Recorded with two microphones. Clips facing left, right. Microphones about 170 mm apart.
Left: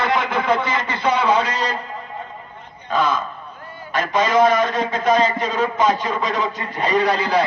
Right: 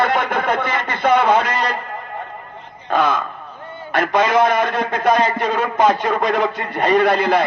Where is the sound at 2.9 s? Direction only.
60° right (ahead or behind).